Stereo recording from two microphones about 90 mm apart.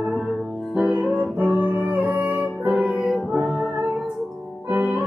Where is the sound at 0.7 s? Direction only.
20° right (ahead or behind).